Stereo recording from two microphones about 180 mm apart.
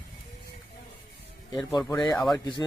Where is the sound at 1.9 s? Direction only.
Centre (ahead or behind).